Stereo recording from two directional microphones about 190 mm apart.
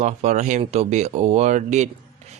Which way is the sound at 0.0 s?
35° right (ahead or behind).